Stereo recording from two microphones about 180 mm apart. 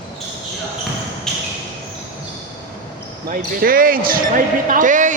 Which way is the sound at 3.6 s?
50° right (ahead or behind).